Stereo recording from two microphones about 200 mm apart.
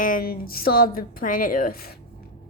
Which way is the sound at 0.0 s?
45° left (ahead or behind).